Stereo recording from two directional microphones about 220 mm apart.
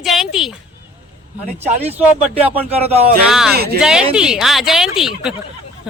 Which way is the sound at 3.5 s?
45° right (ahead or behind).